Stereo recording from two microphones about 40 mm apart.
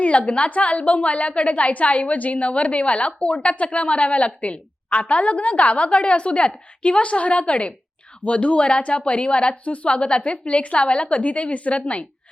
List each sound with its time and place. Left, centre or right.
0.0 s a woman's voice: left